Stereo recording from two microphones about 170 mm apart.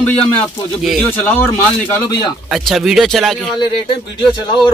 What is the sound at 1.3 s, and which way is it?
Speech, 10° left (ahead or behind).